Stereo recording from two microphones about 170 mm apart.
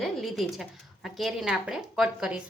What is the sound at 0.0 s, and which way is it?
A woman's voice, centre (ahead or behind).